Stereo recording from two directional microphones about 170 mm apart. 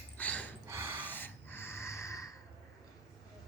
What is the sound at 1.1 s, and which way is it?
Snort, 10° left (ahead or behind).